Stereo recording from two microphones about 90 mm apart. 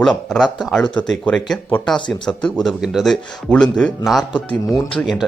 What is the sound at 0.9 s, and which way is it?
Speech, 15° left (ahead or behind).